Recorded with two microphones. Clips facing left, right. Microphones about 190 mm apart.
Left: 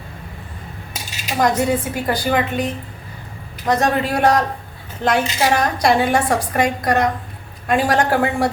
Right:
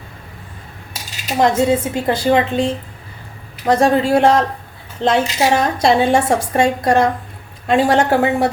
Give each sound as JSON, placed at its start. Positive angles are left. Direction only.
{"t": 1.4, "sound": "a woman's voice", "side_deg": -25}